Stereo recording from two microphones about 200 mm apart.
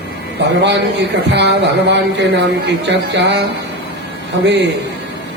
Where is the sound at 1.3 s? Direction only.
60° right (ahead or behind).